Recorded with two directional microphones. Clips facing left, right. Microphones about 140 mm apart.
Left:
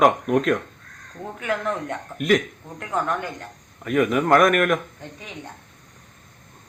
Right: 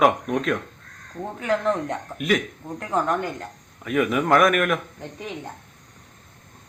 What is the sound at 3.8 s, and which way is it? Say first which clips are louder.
A man's voice: left 2 dB; centre (ahead or behind).